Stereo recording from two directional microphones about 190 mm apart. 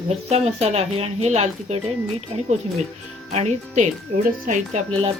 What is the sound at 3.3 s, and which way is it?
Speech, 35° right (ahead or behind).